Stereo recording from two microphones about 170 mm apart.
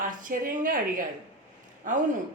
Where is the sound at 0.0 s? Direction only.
50° right (ahead or behind).